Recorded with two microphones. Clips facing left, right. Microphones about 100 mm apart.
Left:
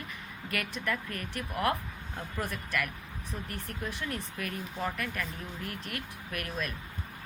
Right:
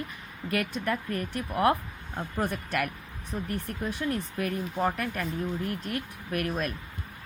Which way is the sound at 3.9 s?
40° right (ahead or behind).